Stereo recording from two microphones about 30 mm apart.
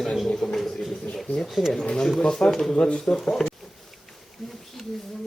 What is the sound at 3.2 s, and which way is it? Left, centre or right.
Speech, centre.